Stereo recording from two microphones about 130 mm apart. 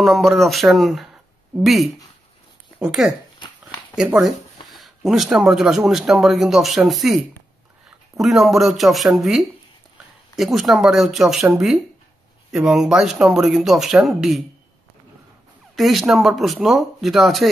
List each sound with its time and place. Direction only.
0.0 s speech: centre (ahead or behind)
3.3 s a sound: 30° left (ahead or behind)
3.9 s speech: 5° right (ahead or behind)
8.2 s speech: centre (ahead or behind)
15.7 s speech: centre (ahead or behind)